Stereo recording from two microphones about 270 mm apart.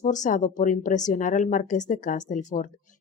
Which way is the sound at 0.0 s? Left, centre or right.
Left.